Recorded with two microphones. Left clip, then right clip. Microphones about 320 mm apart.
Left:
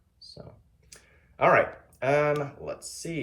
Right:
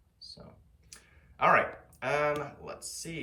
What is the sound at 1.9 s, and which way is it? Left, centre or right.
Speech, centre.